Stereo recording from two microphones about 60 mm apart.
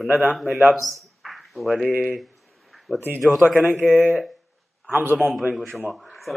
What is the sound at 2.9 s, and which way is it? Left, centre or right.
Speech, right.